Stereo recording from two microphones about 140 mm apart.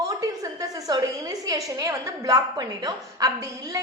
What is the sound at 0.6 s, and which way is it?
A woman's voice, 25° right (ahead or behind).